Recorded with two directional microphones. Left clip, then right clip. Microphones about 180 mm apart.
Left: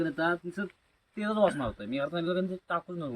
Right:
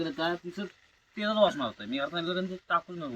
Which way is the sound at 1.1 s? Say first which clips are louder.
Right 2 dB; 30° left (ahead or behind).